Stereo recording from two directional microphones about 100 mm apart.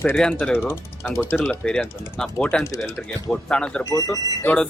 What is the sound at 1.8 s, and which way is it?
Speech, 20° left (ahead or behind).